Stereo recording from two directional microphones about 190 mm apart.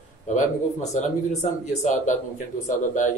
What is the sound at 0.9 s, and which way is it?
Speech, 35° left (ahead or behind).